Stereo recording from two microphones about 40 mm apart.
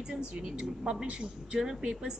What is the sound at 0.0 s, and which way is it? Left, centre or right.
A woman's voice, right.